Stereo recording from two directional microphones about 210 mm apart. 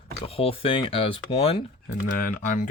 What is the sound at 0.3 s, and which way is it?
Speech, 25° left (ahead or behind).